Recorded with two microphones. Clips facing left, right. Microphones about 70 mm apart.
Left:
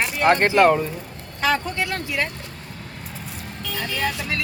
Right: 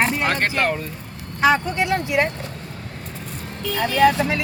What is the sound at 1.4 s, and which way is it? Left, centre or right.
Speech, right.